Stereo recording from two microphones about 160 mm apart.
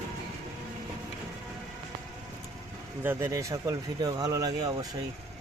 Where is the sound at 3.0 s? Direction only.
15° right (ahead or behind).